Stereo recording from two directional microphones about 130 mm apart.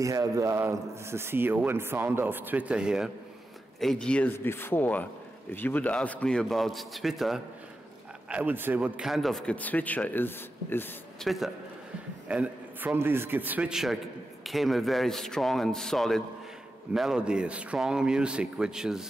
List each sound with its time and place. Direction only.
0.0 s a man's voice: 25° right (ahead or behind); by 3.1 s 5° right (ahead or behind)
3.8 s a man's voice: 5° left (ahead or behind)
9.6 s speech: 10° left (ahead or behind)
11.1 s speech: centre (ahead or behind)
12.3 s a man's voice: 10° right (ahead or behind)